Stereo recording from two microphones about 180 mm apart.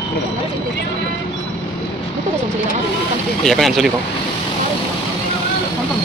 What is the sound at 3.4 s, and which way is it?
Speech, centre (ahead or behind).